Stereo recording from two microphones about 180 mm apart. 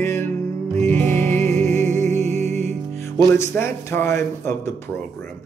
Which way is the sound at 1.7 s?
40° right (ahead or behind).